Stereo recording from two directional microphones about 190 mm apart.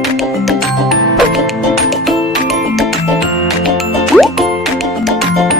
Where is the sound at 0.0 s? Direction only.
Centre (ahead or behind).